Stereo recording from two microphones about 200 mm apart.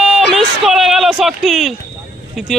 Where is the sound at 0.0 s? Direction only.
Centre (ahead or behind).